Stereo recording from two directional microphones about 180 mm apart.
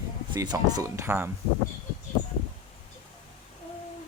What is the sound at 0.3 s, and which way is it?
Speech, 20° right (ahead or behind).